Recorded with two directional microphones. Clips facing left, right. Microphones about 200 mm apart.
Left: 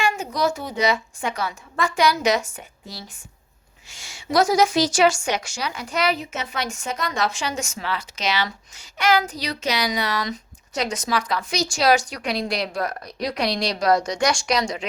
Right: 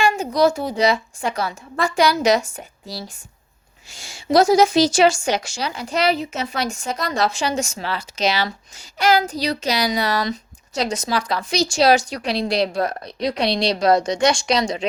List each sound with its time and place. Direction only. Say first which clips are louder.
0.0 s a woman's voice: right 5 dB; 30° right (ahead or behind)